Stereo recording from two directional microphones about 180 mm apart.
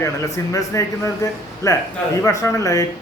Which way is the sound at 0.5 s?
15° left (ahead or behind).